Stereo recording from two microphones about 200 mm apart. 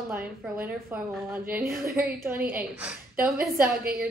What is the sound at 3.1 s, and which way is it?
Speech, 45° right (ahead or behind).